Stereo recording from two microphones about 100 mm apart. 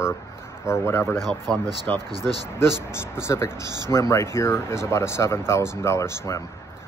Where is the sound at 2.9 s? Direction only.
25° left (ahead or behind).